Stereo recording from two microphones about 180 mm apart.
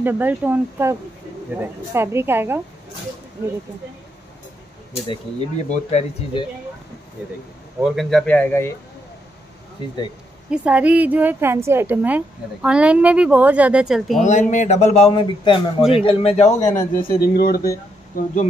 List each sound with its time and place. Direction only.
0.0 s a woman's voice: 10° right (ahead or behind)
4.9 s a man's voice: 25° left (ahead or behind)
7.8 s speech: centre (ahead or behind)
10.5 s a woman's voice: 5° right (ahead or behind)
14.2 s a man's voice: 45° left (ahead or behind); by 17.6 s 60° left (ahead or behind)
18.1 s speech: 45° left (ahead or behind)